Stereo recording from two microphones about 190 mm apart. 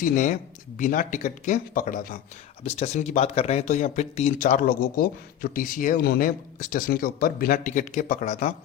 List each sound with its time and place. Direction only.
0.0 s speech: 45° left (ahead or behind)
2.6 s speech: 35° left (ahead or behind)